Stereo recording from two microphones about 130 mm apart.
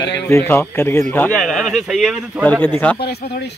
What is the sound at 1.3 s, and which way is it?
Speech, centre (ahead or behind).